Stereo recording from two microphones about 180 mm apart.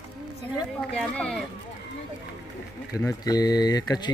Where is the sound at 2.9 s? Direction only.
20° left (ahead or behind).